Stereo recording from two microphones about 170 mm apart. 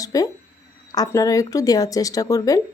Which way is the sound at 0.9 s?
20° left (ahead or behind).